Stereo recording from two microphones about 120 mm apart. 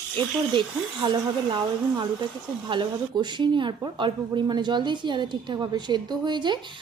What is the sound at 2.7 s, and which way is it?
A woman's voice, 40° right (ahead or behind).